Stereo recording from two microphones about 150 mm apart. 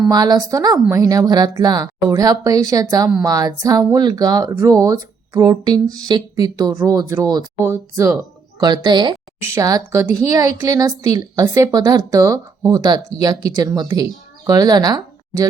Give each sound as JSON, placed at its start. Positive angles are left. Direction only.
{"t": 0.1, "sound": "a woman's voice", "side_deg": -25}